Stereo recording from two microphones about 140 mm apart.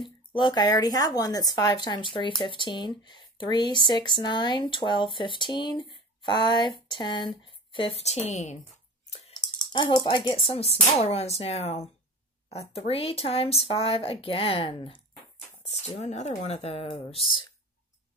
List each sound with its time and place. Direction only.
0.0 s a woman's voice: 35° left (ahead or behind); by 8.5 s 55° left (ahead or behind)
9.3 s speech: 30° left (ahead or behind)
15.6 s a sound: 50° left (ahead or behind)
16.0 s speech: 55° left (ahead or behind); by 17.5 s 40° left (ahead or behind)